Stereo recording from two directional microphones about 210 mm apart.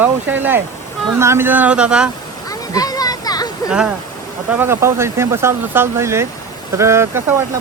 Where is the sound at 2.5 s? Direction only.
15° left (ahead or behind).